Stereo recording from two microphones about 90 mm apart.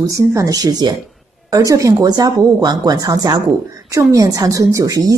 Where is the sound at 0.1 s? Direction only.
35° right (ahead or behind).